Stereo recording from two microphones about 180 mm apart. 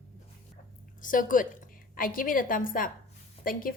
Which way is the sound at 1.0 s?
45° left (ahead or behind).